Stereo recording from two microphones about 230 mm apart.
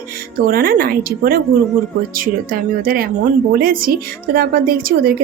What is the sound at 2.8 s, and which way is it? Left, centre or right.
A woman's voice, right.